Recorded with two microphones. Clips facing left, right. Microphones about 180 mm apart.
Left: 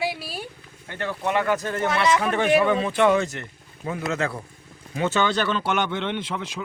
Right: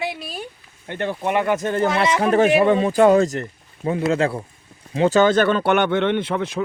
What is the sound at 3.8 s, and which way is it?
Speech, 30° right (ahead or behind).